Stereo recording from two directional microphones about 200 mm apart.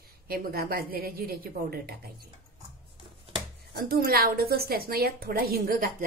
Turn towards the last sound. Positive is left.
turn(degrees=-45)  # may be behind; listen again after turning